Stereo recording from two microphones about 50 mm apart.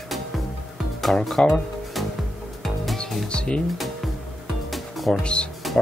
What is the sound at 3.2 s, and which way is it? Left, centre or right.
Speech, left.